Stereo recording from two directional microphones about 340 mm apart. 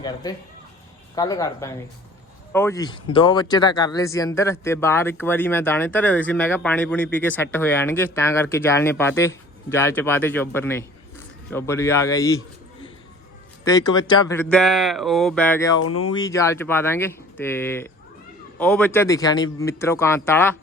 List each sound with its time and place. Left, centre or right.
0.0 s speech: centre
13.7 s speech: centre
15.8 s speech: left
16.1 s speech: centre